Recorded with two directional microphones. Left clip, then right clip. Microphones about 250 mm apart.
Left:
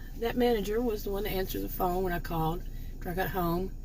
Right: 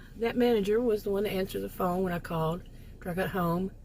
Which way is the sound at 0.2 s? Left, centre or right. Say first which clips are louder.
Right 1 dB; right.